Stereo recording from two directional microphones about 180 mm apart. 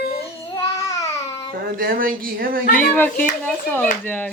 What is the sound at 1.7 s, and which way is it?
Speech, 55° right (ahead or behind).